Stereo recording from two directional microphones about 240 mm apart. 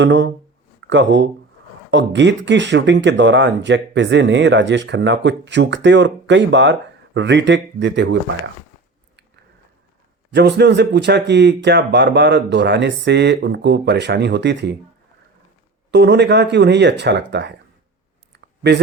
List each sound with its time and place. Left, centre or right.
0.0 s speech: right
10.3 s speech: right
15.9 s speech: right
18.3 s clicking: right